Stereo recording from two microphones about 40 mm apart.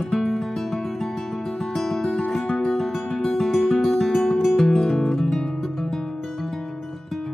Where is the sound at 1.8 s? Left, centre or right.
Centre.